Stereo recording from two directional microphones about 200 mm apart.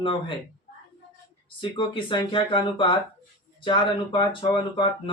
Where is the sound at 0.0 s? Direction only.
25° left (ahead or behind).